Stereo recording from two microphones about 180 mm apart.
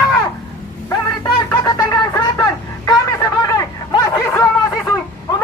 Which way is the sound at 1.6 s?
20° left (ahead or behind).